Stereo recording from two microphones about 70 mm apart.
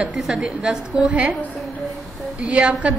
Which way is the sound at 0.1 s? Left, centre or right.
Centre.